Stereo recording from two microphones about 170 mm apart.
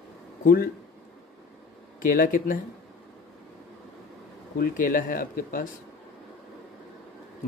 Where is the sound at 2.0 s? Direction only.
55° left (ahead or behind).